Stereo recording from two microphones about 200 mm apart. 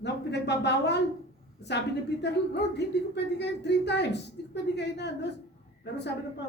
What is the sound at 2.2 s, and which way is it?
Speech, 55° left (ahead or behind).